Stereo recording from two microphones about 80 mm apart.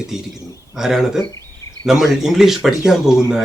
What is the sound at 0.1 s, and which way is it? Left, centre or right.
Speech, centre.